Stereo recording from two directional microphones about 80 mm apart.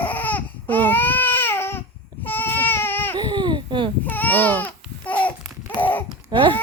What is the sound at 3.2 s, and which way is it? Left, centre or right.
Babbling, right.